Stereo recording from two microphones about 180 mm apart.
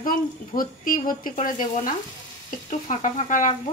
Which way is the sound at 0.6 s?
50° left (ahead or behind).